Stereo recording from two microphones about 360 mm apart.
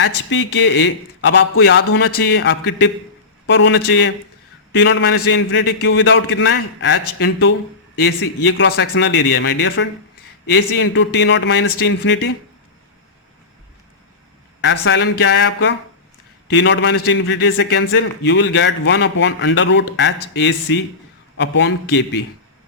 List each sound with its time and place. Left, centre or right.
0.0 s a man's voice: left
14.6 s a man's voice: left